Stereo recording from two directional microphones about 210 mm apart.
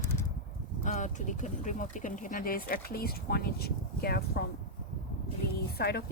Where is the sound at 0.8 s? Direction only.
35° left (ahead or behind).